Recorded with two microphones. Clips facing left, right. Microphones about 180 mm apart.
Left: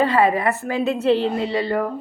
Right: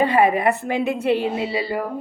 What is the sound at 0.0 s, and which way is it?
Speech, 15° right (ahead or behind).